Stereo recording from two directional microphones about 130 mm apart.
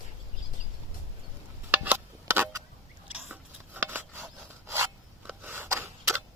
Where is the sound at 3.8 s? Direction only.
15° right (ahead or behind).